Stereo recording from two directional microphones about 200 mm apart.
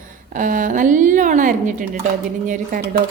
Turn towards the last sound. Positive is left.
turn(degrees=-50)  # may be behind; listen again after turning